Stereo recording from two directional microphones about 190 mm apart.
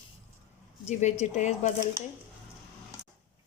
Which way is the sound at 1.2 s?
40° left (ahead or behind).